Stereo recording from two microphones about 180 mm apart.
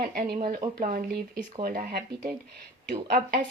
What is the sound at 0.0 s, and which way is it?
Speech, 60° right (ahead or behind).